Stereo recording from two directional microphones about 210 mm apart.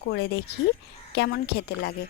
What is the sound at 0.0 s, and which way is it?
Speech, 50° left (ahead or behind).